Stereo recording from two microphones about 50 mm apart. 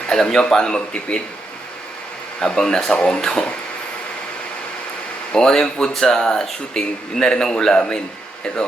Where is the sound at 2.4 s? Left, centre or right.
Centre.